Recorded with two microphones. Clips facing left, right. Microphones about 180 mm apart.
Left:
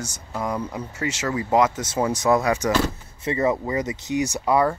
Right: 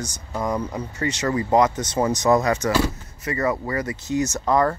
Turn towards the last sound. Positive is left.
turn(degrees=10)  # may be behind; listen again after turning